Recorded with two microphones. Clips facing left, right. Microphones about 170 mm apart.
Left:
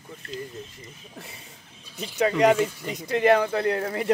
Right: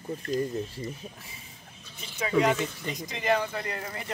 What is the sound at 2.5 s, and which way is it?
Speech, 10° left (ahead or behind).